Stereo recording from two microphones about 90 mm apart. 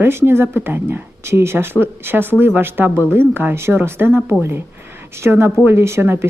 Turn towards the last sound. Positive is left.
turn(degrees=-25)  # may be behind; listen again after turning